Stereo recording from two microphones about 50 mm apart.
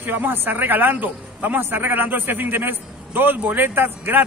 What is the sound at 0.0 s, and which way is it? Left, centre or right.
A man's voice, right.